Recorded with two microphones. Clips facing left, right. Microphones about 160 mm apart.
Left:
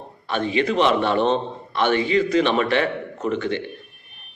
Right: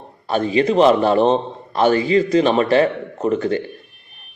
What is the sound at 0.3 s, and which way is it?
A man's voice, 35° right (ahead or behind).